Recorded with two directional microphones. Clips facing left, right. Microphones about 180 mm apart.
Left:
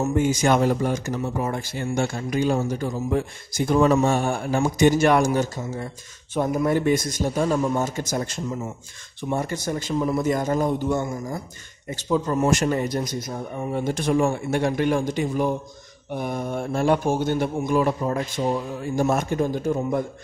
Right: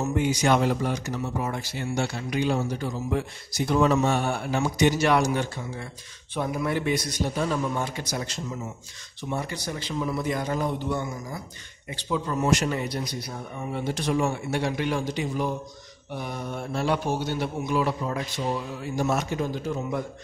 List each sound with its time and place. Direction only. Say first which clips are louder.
0.0 s speech: left 3 dB; 45° left (ahead or behind)